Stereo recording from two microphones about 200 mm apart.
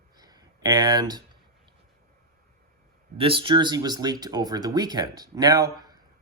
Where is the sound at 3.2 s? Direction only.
25° right (ahead or behind).